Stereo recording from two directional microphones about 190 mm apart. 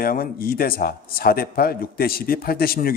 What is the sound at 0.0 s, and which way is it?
A man's voice, 50° left (ahead or behind).